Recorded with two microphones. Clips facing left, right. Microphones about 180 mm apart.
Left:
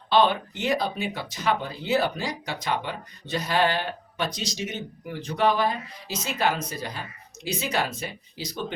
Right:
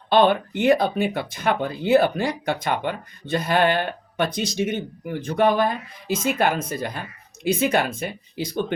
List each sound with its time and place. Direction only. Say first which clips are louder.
0.1 s speech: right 4 dB; 55° right (ahead or behind)